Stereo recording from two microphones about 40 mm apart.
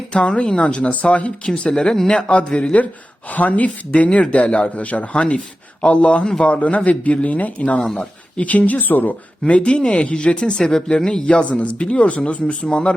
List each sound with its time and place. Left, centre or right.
0.1 s speech: left
2.0 s speech: left
9.5 s speech: left
10.6 s speech: centre